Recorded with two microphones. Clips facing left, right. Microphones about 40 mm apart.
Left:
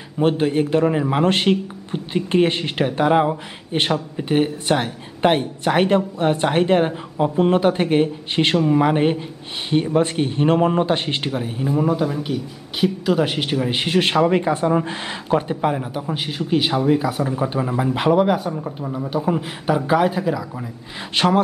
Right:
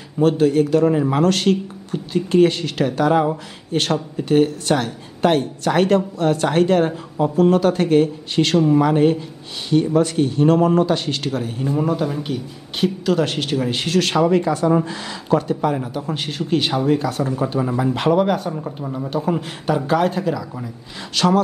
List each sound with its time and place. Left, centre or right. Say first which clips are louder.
0.2 s speech: right 3 dB; left
11.2 s speech: even; centre
15.7 s speech: right 1 dB; centre
21.1 s speech: right 1 dB; left